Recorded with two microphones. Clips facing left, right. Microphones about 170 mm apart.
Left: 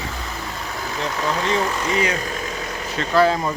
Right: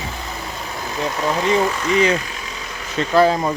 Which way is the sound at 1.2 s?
15° right (ahead or behind).